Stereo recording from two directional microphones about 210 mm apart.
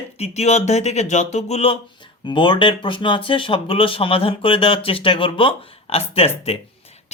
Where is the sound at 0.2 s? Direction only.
30° left (ahead or behind).